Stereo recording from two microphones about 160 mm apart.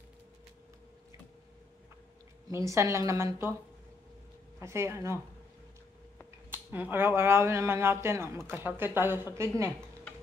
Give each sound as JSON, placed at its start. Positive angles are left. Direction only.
{"t": 2.5, "sound": "speech", "side_deg": -20}
{"t": 4.6, "sound": "speech", "side_deg": -15}
{"t": 6.5, "sound": "speech", "side_deg": -15}